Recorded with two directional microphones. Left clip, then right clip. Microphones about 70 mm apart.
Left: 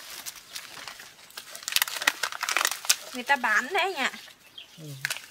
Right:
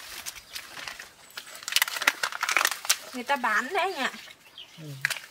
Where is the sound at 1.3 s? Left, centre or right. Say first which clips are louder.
Right 1 dB; centre.